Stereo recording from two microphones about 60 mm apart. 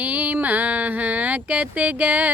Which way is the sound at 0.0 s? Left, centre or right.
Right.